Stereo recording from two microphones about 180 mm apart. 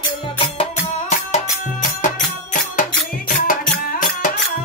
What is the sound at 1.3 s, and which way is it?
Music, 45° left (ahead or behind).